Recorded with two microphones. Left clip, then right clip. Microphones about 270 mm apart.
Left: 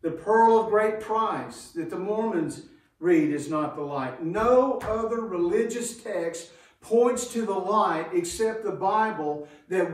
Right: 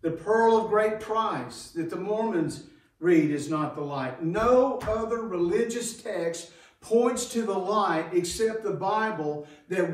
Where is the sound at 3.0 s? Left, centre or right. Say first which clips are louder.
Even; centre.